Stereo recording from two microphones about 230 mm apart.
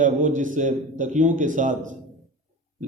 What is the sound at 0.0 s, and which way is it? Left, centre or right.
A man's voice, right.